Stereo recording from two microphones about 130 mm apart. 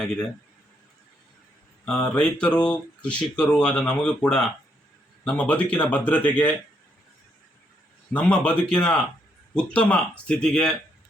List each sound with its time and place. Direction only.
1.8 s speech: 5° left (ahead or behind)
8.1 s speech: 10° left (ahead or behind)